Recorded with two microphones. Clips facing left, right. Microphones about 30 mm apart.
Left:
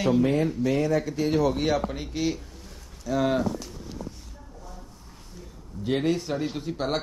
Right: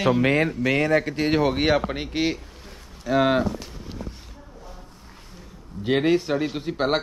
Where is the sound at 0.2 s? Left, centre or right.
Right.